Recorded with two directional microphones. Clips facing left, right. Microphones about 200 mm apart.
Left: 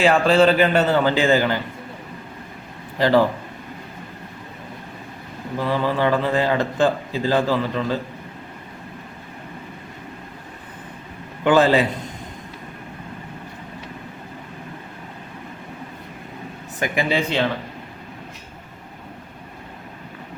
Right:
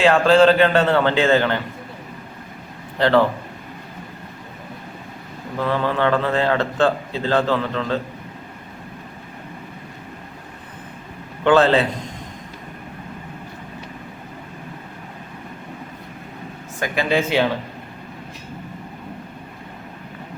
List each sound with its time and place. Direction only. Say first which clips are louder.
0.0 s a man's voice: right 2 dB; 5° left (ahead or behind)
3.0 s a man's voice: even; 10° left (ahead or behind)
5.5 s a man's voice: even; 10° left (ahead or behind)
11.4 s a man's voice: right 1 dB; 10° left (ahead or behind)
16.8 s a man's voice: left 1 dB; 15° left (ahead or behind)
17.1 s speech: right 6 dB; 5° right (ahead or behind)